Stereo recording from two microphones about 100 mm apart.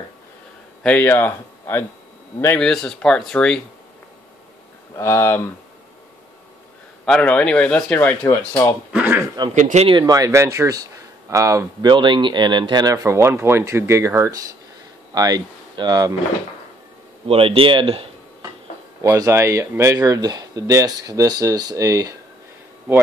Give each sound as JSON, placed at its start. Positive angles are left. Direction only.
{"t": 0.8, "sound": "speech", "side_deg": 15}
{"t": 2.6, "sound": "speech", "side_deg": 5}
{"t": 4.9, "sound": "speech", "side_deg": 25}
{"t": 7.1, "sound": "speech", "side_deg": 10}
{"t": 9.4, "sound": "speech", "side_deg": -45}
{"t": 11.9, "sound": "speech", "side_deg": -55}
{"t": 17.3, "sound": "speech", "side_deg": -70}
{"t": 19.0, "sound": "speech", "side_deg": -30}